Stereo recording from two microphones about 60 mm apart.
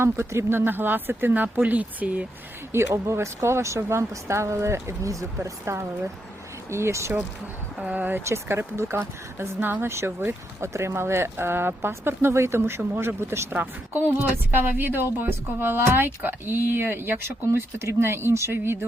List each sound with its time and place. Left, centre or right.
0.0 s a woman's voice: right
2.7 s speech: right
7.9 s speech: right
8.2 s speech: right
9.6 s a woman's voice: right
9.9 s speech: right
13.5 s a woman's voice: right
17.2 s speech: right